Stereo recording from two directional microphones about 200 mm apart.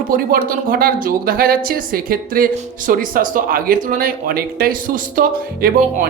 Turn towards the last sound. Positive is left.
turn(degrees=-45)  # may be behind; listen again after turning